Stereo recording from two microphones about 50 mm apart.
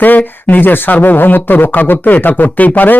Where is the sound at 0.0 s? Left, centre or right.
Left.